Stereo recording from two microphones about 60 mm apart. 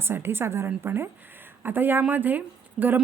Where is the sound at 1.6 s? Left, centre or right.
Right.